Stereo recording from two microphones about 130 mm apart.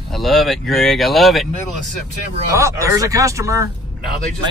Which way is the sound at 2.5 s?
25° right (ahead or behind).